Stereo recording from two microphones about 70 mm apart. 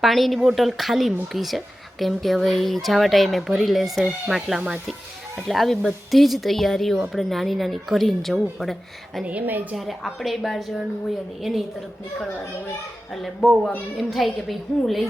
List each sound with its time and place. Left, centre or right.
0.0 s speech: centre
9.2 s a woman's voice: right
9.7 s speech: centre
13.4 s speech: centre